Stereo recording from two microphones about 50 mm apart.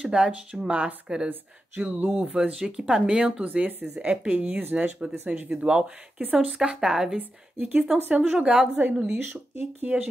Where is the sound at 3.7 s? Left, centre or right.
Right.